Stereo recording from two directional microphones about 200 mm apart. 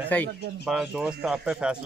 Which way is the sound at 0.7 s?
5° right (ahead or behind).